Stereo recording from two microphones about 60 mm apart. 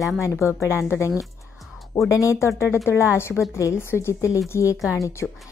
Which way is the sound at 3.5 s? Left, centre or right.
Left.